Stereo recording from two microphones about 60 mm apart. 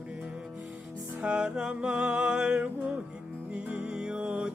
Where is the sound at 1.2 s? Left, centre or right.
Centre.